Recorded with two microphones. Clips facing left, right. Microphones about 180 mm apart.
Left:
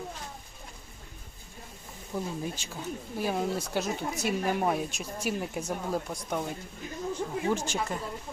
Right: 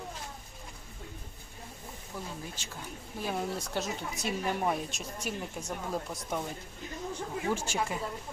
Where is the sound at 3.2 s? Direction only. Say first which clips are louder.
Left 4 dB; 5° left (ahead or behind).